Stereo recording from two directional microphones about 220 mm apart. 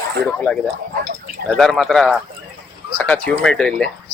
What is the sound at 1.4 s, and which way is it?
Speech, centre (ahead or behind).